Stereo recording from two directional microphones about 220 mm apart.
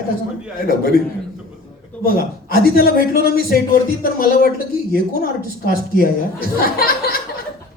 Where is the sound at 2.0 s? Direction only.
45° left (ahead or behind).